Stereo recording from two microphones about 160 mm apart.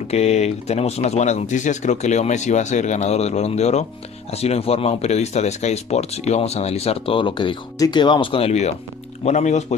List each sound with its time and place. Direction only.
0.1 s speech: 40° left (ahead or behind)